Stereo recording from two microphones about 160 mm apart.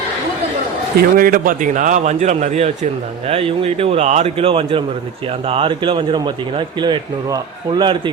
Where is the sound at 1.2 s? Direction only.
60° right (ahead or behind).